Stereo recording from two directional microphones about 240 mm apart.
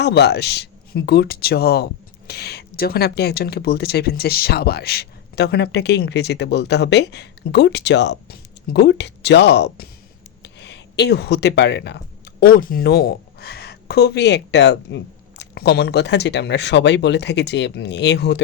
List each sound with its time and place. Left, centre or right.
0.0 s speech: left